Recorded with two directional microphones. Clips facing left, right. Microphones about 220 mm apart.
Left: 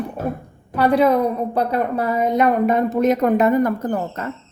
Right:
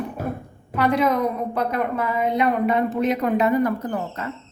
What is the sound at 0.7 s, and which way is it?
A woman's voice, 35° left (ahead or behind).